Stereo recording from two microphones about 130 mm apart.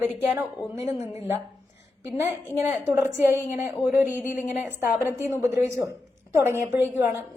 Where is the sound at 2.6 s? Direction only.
20° right (ahead or behind).